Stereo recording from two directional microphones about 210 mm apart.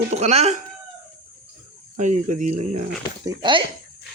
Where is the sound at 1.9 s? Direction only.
35° right (ahead or behind).